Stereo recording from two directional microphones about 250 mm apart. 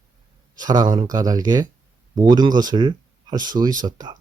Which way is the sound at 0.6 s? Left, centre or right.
Centre.